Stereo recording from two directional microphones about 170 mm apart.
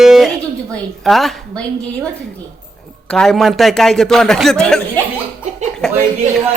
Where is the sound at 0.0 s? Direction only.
Centre (ahead or behind).